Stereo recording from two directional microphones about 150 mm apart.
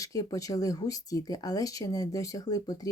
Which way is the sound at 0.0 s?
25° left (ahead or behind).